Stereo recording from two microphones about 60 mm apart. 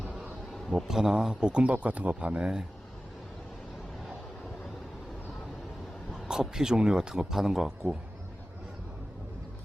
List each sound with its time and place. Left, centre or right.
0.7 s speech: centre
6.2 s speech: centre